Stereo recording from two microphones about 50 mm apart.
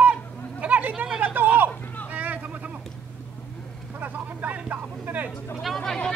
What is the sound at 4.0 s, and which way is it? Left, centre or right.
Vehicle, right.